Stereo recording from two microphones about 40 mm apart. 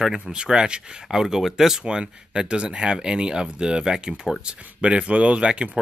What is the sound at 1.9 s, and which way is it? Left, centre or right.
Speech, right.